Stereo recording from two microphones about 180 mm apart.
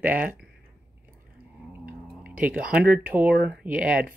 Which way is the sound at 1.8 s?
10° right (ahead or behind).